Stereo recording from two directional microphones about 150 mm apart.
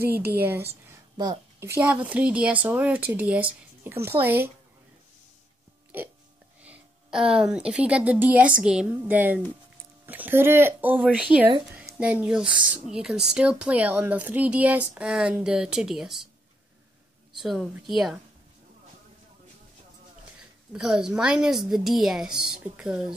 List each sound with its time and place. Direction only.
0.0 s speech: 15° right (ahead or behind)
1.1 s a woman's voice: 30° right (ahead or behind)
1.8 s speech: 10° right (ahead or behind)
6.6 s a woman's voice: 5° right (ahead or behind)
17.4 s a woman's voice: centre (ahead or behind)
20.7 s a woman's voice: 5° right (ahead or behind)